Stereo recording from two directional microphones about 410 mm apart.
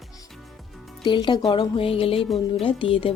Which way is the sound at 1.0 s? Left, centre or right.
Centre.